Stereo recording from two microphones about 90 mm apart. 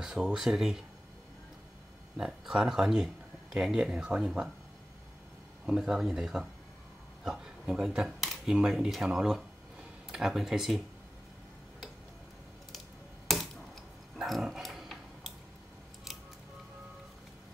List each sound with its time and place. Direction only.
0.0 s speech: 5° right (ahead or behind)
2.1 s speech: 5° right (ahead or behind)
5.7 s speech: 5° right (ahead or behind)
13.3 s a sound: centre (ahead or behind)